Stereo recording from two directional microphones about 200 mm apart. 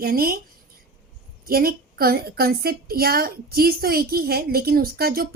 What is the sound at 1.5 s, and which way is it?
A woman's voice, 50° right (ahead or behind).